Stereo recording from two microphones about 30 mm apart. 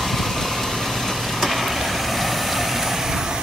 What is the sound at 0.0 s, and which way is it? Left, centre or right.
Vehicle, centre.